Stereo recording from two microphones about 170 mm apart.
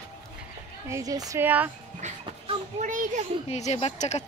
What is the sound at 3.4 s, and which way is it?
Speech, 40° left (ahead or behind).